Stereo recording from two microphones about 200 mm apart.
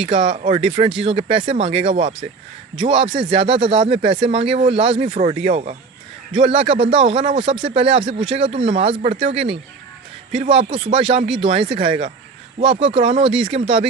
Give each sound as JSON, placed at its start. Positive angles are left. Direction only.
{"t": 0.0, "sound": "speech", "side_deg": -25}